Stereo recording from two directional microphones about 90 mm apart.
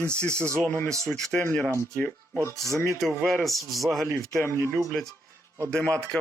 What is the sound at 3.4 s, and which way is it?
Speech, centre (ahead or behind).